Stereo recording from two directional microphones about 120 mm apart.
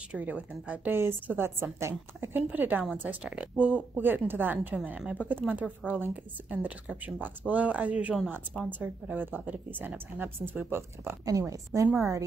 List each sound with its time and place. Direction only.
0.1 s a woman's voice: 10° right (ahead or behind)
11.2 s a woman's voice: 30° right (ahead or behind)